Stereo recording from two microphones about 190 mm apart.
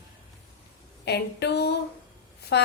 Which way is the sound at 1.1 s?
60° left (ahead or behind).